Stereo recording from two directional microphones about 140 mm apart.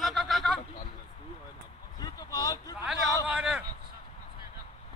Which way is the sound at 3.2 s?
10° right (ahead or behind).